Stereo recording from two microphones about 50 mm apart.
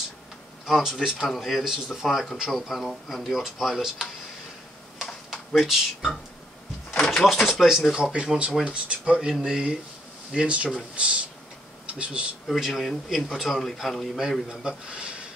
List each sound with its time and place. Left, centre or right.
0.7 s a man's voice: centre
5.3 s speech: centre
7.1 s a sound: centre
7.6 s speech: centre
8.0 s speech: right
9.3 s speech: centre
12.4 s a man's voice: centre
14.5 s speech: centre